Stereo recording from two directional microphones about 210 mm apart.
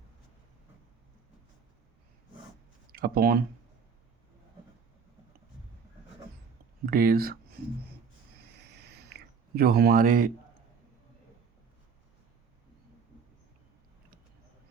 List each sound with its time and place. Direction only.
2.9 s speech: 45° right (ahead or behind)
6.8 s speech: 45° right (ahead or behind)
8.6 s a sound: 50° right (ahead or behind)